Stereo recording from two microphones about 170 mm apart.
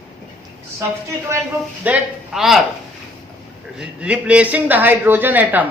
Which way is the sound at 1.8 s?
5° right (ahead or behind).